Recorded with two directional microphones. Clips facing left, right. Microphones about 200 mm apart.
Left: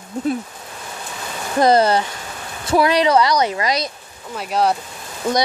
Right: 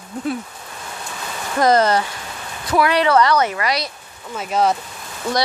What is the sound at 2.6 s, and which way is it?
Speech, 25° left (ahead or behind).